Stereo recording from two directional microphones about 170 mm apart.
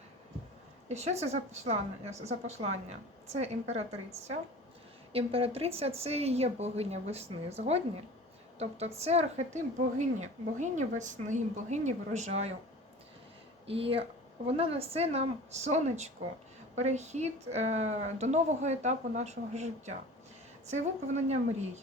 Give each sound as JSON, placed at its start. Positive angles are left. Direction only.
{"t": 0.9, "sound": "a woman's voice", "side_deg": -40}
{"t": 5.1, "sound": "a woman's voice", "side_deg": -35}
{"t": 13.7, "sound": "a woman's voice", "side_deg": -35}